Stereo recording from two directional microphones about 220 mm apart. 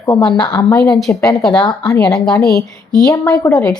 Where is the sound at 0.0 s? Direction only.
15° left (ahead or behind).